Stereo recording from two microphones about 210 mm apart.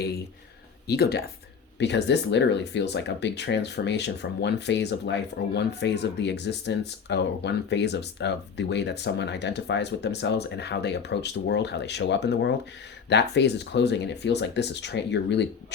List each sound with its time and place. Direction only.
0.9 s speech: 50° left (ahead or behind)